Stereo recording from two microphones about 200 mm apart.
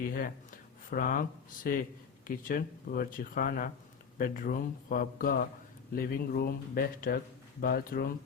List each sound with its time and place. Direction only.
0.0 s speech: 45° left (ahead or behind)